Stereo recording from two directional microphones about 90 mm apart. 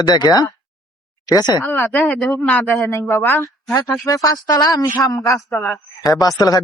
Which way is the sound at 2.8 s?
30° left (ahead or behind).